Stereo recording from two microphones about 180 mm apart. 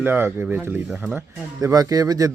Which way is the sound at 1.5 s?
20° right (ahead or behind).